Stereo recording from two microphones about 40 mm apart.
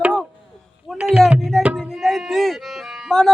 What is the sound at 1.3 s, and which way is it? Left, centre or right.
Tabla, centre.